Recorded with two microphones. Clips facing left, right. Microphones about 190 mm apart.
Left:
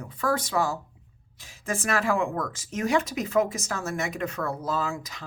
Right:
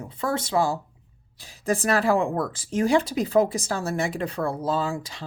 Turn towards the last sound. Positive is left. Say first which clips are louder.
# right 3 dB
turn(degrees=-30)  # may be behind; listen again after turning